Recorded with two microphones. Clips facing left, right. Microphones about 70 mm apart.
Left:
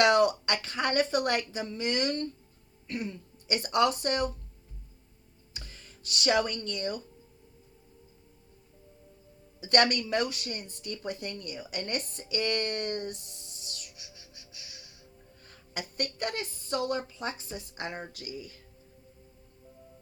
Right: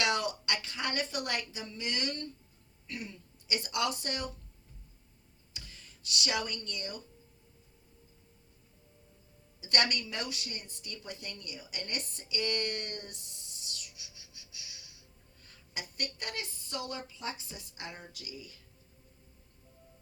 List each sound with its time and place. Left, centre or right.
0.0 s speech: left
5.5 s speech: left
9.6 s speech: left